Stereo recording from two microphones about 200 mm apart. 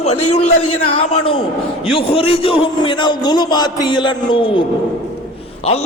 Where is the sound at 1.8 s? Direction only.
25° left (ahead or behind).